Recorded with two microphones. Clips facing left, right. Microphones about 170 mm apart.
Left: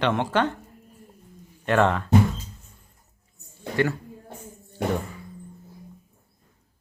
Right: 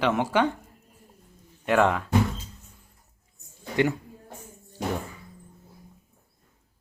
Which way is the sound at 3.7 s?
20° right (ahead or behind).